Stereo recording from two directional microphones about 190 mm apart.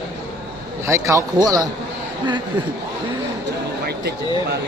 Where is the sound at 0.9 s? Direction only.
15° right (ahead or behind).